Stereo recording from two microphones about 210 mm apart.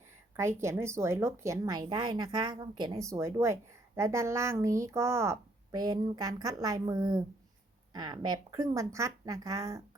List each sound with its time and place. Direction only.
0.3 s a woman's voice: 15° right (ahead or behind)